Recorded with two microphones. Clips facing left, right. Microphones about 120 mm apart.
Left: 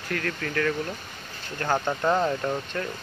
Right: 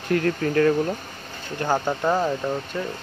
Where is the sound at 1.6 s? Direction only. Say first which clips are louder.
Right 2 dB; 10° right (ahead or behind).